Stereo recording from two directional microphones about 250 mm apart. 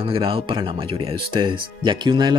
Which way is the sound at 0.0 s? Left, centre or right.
Right.